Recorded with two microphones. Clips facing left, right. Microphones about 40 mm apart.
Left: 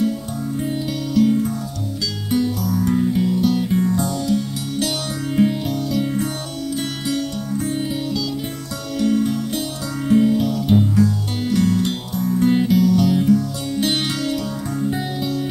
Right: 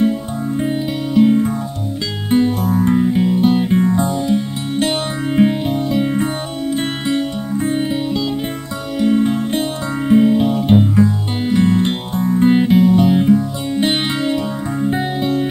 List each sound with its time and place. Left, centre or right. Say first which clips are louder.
0.6 s music: right 4 dB; right